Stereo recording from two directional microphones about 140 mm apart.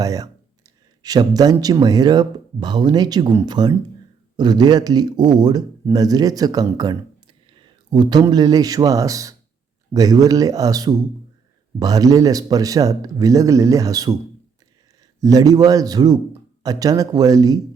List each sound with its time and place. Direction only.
0.0 s a man's voice: 25° right (ahead or behind)
15.2 s speech: 25° right (ahead or behind)